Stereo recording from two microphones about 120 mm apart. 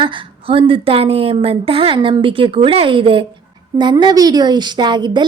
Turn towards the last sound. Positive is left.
turn(degrees=-40)  # may be behind; listen again after turning